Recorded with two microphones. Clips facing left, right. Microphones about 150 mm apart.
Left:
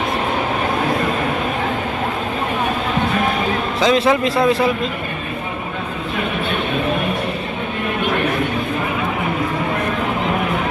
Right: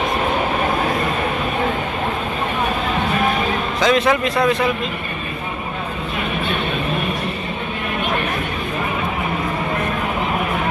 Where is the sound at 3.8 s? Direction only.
30° left (ahead or behind).